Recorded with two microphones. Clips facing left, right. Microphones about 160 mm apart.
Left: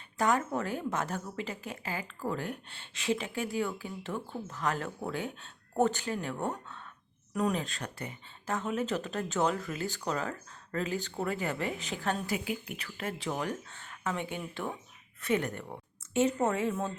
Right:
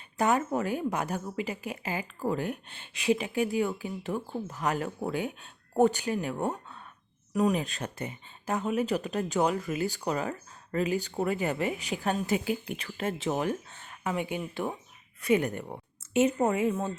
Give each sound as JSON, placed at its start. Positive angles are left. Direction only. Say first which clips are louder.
{"t": 0.2, "sound": "a woman's voice", "louder": "right 3 dB", "side_deg": -15}
{"t": 12.3, "sound": "a woman's voice", "louder": "right 5 dB", "side_deg": -30}